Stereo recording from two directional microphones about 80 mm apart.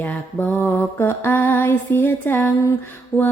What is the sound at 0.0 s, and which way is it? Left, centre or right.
Music, centre.